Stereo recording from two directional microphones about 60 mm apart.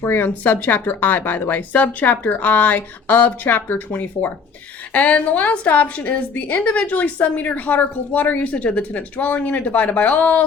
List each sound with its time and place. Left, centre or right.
0.0 s a woman's voice: left